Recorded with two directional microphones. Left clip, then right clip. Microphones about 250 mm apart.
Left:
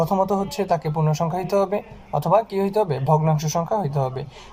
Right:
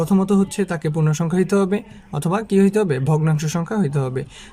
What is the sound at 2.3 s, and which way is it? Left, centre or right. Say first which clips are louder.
A man's voice: right 1 dB; right.